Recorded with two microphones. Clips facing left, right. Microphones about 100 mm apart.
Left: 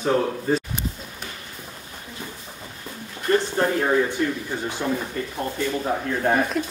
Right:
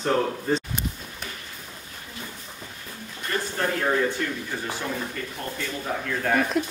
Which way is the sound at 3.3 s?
30° left (ahead or behind).